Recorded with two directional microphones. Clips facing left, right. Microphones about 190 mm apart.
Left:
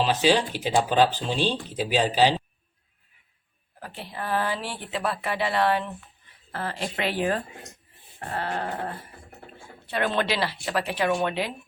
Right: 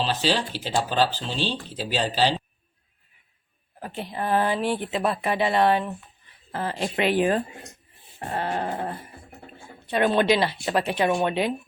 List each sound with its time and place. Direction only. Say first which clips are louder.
0.0 s speech: left 3 dB; 15° left (ahead or behind)
3.8 s a woman's voice: right 5 dB; 20° right (ahead or behind)